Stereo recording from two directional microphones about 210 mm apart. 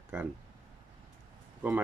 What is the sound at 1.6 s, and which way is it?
Speech, 10° right (ahead or behind).